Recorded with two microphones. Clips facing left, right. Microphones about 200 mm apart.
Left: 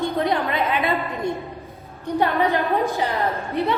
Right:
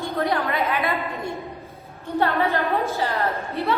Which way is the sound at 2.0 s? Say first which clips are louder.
Left 2 dB; 15° left (ahead or behind).